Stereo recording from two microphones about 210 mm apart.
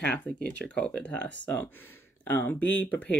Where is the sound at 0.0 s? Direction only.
5° left (ahead or behind).